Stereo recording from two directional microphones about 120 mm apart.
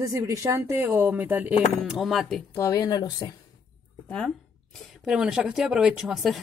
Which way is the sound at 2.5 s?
25° left (ahead or behind).